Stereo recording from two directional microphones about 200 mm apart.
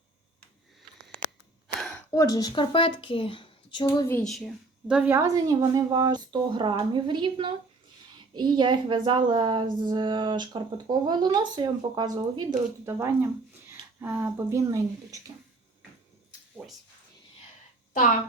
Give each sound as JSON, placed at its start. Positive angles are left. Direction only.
{"t": 1.6, "sound": "a sound", "side_deg": 5}
{"t": 2.1, "sound": "speech", "side_deg": 15}
{"t": 4.1, "sound": "speech", "side_deg": 0}
{"t": 16.6, "sound": "speech", "side_deg": 0}